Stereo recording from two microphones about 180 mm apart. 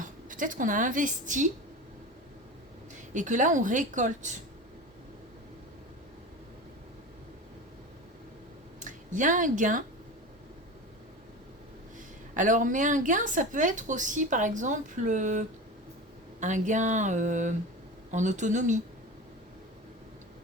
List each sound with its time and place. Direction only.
0.0 s speech: 45° right (ahead or behind)
3.1 s a woman's voice: 45° right (ahead or behind)
8.8 s speech: 45° right (ahead or behind)
12.3 s a woman's voice: 45° right (ahead or behind)